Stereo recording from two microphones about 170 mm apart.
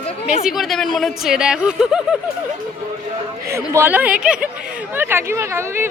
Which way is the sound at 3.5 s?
15° right (ahead or behind).